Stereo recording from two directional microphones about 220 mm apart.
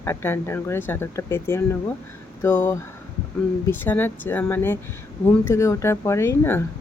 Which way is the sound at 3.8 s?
10° left (ahead or behind).